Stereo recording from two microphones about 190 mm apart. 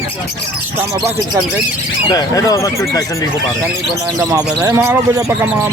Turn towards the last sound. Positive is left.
turn(degrees=-15)  # may be behind; listen again after turning